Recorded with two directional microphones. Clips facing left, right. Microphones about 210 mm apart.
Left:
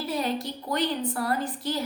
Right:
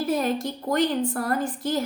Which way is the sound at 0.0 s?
50° right (ahead or behind).